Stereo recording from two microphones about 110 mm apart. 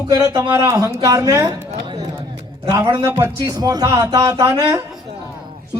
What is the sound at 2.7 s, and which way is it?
Speech, 30° right (ahead or behind).